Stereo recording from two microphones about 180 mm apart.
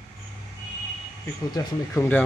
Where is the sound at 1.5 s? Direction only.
15° left (ahead or behind).